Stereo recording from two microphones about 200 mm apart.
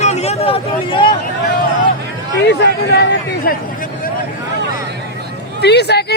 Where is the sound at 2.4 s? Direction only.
55° left (ahead or behind).